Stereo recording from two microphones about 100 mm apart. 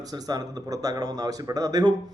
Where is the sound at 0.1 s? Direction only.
40° right (ahead or behind).